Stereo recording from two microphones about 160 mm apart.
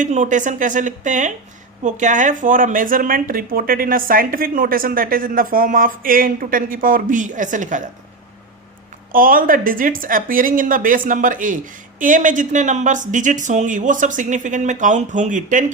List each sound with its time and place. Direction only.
0.0 s speech: 50° right (ahead or behind)
9.1 s speech: 60° right (ahead or behind)